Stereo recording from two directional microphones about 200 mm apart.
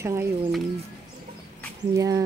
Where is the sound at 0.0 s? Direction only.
15° right (ahead or behind).